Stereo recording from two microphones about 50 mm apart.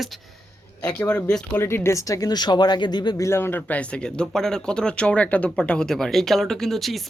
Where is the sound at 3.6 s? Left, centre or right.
Left.